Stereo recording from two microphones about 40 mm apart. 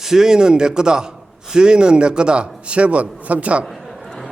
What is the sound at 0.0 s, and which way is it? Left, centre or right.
A man's voice, centre.